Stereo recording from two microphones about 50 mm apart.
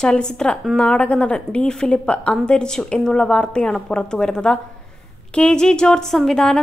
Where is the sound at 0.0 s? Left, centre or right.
Centre.